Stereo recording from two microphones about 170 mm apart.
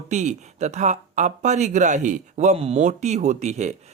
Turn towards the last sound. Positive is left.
turn(degrees=-40)  # may be behind; listen again after turning